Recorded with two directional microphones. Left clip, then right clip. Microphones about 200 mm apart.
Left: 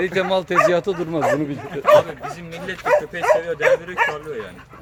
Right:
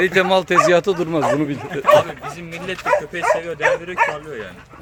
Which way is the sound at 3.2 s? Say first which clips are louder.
Left 1 dB; 35° left (ahead or behind).